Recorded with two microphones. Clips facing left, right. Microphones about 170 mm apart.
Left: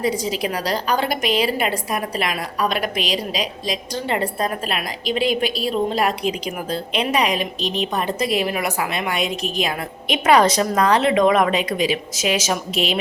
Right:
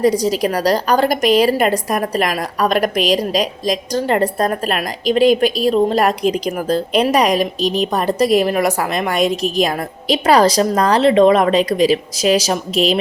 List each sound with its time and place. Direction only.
0.0 s a woman's voice: 40° right (ahead or behind)